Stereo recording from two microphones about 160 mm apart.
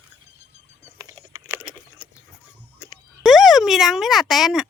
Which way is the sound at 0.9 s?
20° right (ahead or behind).